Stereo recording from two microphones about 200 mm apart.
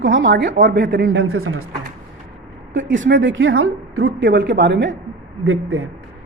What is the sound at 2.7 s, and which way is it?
A woman's voice, 70° right (ahead or behind).